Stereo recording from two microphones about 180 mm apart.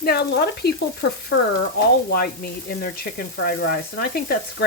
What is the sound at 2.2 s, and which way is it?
Speech, 55° left (ahead or behind).